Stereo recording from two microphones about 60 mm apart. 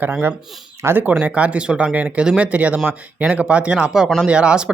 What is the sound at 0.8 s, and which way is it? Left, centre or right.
Speech, right.